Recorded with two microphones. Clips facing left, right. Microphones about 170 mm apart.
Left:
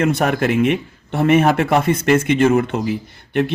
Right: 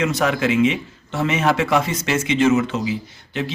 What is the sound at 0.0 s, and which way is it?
A man's voice, 55° left (ahead or behind).